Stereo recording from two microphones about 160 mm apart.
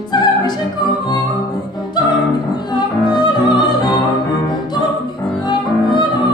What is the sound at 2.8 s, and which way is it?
Music, 25° left (ahead or behind).